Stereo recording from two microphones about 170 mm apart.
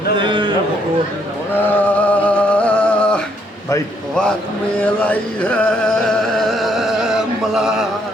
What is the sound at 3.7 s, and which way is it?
Speech, 20° left (ahead or behind).